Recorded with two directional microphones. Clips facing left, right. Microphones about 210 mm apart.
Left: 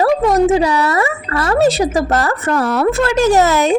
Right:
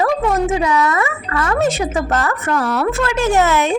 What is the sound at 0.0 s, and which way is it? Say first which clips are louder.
Speech: left 4 dB; 35° left (ahead or behind).